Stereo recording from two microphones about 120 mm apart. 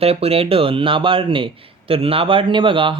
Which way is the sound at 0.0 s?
55° right (ahead or behind).